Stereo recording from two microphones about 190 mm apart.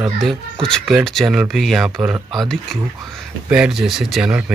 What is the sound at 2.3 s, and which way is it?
Speech, centre (ahead or behind).